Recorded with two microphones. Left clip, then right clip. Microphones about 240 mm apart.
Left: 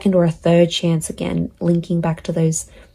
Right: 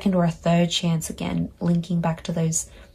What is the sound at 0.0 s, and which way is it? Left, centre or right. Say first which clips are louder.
Speech: left 7 dB; left.